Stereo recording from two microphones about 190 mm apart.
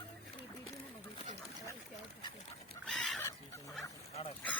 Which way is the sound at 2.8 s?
Centre (ahead or behind).